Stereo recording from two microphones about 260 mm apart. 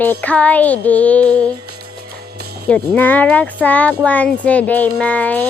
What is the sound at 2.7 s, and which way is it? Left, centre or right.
Music, centre.